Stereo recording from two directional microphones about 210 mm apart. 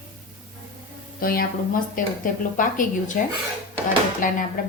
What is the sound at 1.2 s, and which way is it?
A woman's voice, 45° left (ahead or behind).